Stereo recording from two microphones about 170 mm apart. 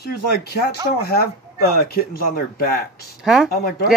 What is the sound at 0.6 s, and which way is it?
Speech, 70° left (ahead or behind).